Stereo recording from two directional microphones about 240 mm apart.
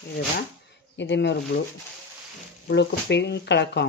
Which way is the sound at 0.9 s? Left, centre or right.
Left.